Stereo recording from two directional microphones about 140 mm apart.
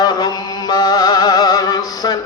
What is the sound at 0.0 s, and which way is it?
Music, 30° left (ahead or behind).